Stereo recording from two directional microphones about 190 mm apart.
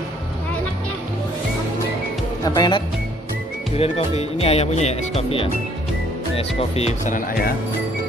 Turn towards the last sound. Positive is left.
turn(degrees=50)  # may be behind; listen again after turning